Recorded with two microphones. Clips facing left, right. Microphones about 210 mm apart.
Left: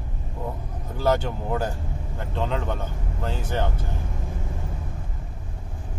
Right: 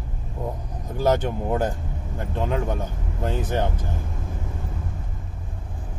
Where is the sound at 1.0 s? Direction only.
15° right (ahead or behind).